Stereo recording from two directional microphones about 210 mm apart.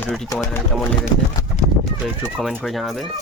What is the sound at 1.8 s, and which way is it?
Speech, centre (ahead or behind).